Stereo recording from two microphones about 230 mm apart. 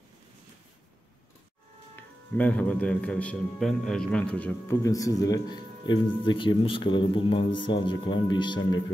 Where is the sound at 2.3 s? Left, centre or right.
Centre.